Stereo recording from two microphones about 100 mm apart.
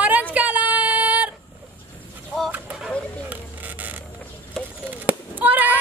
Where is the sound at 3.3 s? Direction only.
15° right (ahead or behind).